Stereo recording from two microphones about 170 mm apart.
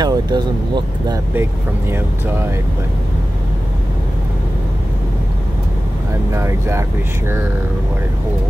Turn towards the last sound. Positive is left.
turn(degrees=-15)  # may be behind; listen again after turning